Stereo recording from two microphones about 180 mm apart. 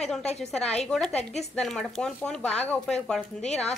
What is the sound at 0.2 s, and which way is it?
Speech, 35° left (ahead or behind).